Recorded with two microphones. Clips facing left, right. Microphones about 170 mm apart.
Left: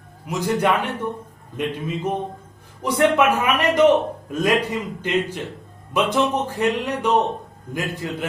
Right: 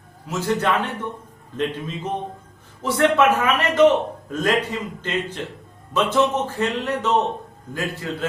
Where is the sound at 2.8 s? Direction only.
15° left (ahead or behind).